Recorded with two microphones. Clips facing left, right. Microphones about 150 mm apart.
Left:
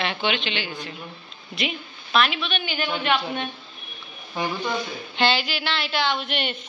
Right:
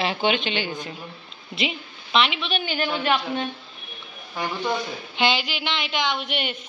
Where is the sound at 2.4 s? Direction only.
35° right (ahead or behind).